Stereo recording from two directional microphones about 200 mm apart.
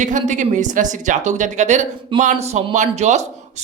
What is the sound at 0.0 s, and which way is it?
Speech, 40° right (ahead or behind).